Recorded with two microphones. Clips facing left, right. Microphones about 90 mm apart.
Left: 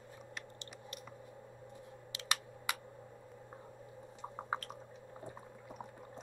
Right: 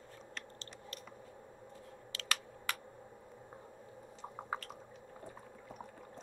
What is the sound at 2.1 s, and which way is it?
Computer keyboard, 20° left (ahead or behind).